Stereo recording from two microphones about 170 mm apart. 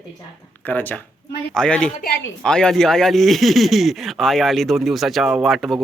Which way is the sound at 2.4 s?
5° left (ahead or behind).